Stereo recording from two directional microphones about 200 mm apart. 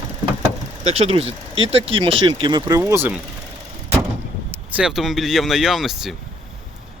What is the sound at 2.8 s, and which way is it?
Speech, 10° right (ahead or behind).